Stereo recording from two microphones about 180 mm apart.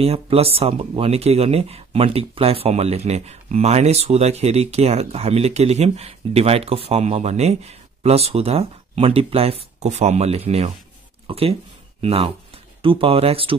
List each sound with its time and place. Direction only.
0.0 s speech: 35° right (ahead or behind)